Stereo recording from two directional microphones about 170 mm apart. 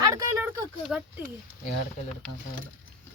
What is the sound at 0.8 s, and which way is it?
Speech, 5° right (ahead or behind).